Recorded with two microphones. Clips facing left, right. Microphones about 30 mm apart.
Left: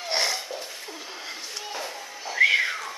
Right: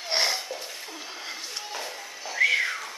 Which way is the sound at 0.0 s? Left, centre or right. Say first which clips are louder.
Even; centre.